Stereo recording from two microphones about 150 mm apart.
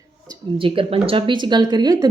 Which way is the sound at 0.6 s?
35° right (ahead or behind).